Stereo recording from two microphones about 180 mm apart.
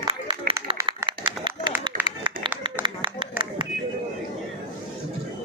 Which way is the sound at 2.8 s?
25° right (ahead or behind).